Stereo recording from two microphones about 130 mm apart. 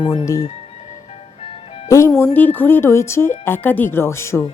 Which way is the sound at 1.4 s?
45° left (ahead or behind).